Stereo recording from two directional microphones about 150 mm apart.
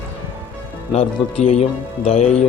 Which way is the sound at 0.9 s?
45° left (ahead or behind).